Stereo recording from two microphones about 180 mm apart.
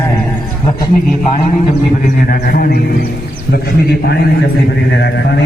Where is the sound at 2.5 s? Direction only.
55° left (ahead or behind).